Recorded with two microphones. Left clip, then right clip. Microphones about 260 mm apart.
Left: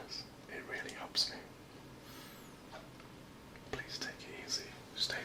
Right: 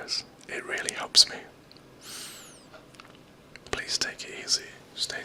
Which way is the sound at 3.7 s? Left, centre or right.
Right.